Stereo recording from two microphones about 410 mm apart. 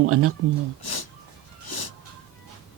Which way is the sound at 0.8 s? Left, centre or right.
Left.